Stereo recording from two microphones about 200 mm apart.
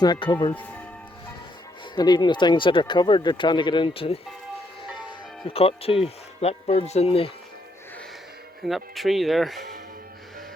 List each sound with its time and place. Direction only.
0.0 s speech: 20° left (ahead or behind)
0.5 s speech: 5° left (ahead or behind)
2.0 s speech: 20° left (ahead or behind)
5.5 s speech: 30° left (ahead or behind)
8.6 s speech: centre (ahead or behind)